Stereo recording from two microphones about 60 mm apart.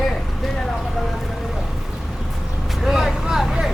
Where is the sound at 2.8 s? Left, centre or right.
Centre.